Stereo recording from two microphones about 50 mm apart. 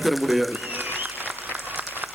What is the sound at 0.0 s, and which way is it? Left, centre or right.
Speech, centre.